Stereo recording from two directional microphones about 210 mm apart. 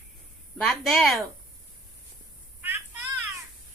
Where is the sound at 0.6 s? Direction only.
Centre (ahead or behind).